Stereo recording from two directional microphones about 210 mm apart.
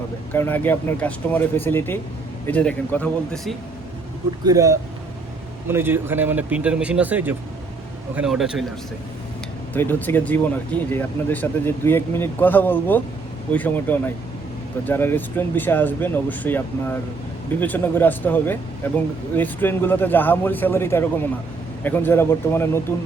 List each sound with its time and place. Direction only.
0.3 s speech: 10° left (ahead or behind)
4.4 s a man's voice: 15° right (ahead or behind)
9.7 s speech: 10° left (ahead or behind)